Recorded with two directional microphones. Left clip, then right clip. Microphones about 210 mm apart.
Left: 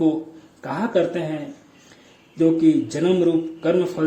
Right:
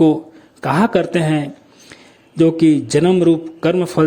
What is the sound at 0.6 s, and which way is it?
Speech, 40° right (ahead or behind).